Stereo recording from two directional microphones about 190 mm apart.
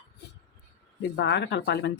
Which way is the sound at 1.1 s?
65° left (ahead or behind).